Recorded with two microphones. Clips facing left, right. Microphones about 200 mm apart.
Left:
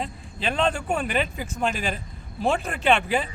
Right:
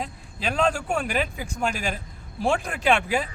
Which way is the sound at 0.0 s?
5° right (ahead or behind).